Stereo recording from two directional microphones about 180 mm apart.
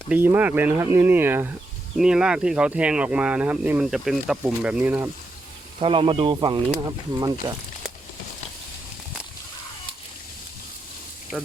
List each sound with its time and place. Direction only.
0.1 s speech: 10° right (ahead or behind)
5.8 s speech: 30° right (ahead or behind)